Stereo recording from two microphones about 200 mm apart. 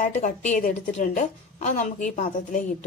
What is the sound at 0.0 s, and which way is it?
A woman's voice, 40° left (ahead or behind).